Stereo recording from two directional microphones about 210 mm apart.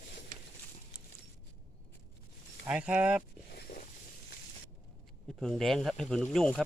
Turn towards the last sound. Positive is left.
turn(degrees=5)  # may be behind; listen again after turning